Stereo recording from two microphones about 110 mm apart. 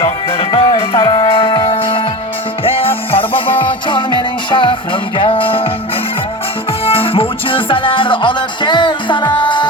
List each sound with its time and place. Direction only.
0.3 s music: 50° left (ahead or behind)